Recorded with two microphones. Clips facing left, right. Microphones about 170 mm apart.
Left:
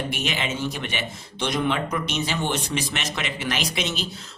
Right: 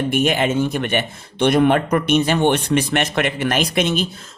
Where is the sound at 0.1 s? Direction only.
50° right (ahead or behind).